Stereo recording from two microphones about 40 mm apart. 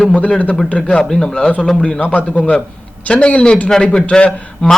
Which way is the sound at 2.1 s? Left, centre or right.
Left.